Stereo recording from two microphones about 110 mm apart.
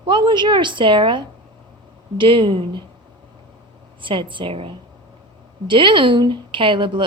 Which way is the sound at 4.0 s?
50° right (ahead or behind).